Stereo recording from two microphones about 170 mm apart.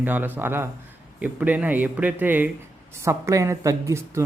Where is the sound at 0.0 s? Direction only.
10° right (ahead or behind).